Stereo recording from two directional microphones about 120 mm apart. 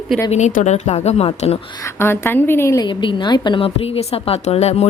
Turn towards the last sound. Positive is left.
turn(degrees=60)  # may be behind; listen again after turning